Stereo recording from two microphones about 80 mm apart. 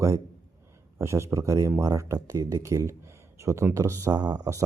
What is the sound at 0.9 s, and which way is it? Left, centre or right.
Speech, right.